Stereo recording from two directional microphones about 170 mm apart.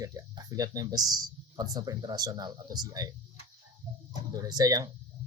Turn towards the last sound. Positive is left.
turn(degrees=-20)  # may be behind; listen again after turning